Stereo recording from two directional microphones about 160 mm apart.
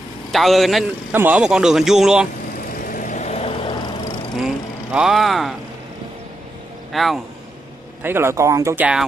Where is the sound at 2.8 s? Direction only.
55° left (ahead or behind); by 3.7 s 40° left (ahead or behind).